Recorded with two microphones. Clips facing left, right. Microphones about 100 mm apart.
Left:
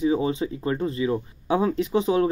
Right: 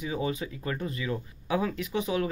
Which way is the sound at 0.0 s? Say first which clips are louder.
Left 8 dB; 30° left (ahead or behind).